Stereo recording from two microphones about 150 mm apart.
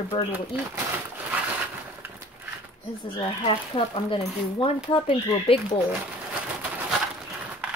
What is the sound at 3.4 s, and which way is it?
A woman's voice, 35° left (ahead or behind).